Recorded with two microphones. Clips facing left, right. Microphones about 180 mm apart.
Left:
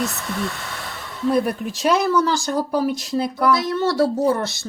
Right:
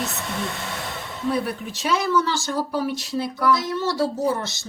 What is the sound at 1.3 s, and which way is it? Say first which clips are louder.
Speech: left 6 dB; 45° left (ahead or behind).